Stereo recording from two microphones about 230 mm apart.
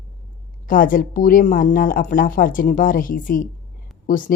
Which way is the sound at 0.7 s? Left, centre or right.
Left.